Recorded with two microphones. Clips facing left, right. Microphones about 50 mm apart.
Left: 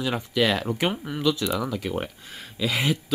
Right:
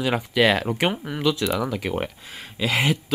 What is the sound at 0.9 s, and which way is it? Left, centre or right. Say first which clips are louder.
Speech: right 1 dB; centre.